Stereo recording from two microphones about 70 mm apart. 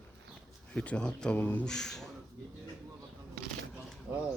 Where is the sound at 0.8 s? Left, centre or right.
Centre.